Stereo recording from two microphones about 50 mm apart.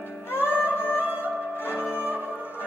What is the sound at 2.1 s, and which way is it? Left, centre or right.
Music, right.